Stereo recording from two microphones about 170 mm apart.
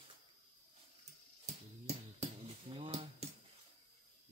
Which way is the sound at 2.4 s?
35° right (ahead or behind).